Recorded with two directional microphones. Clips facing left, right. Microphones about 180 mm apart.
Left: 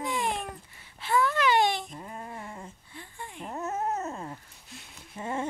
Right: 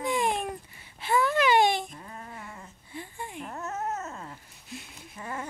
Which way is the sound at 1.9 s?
25° left (ahead or behind).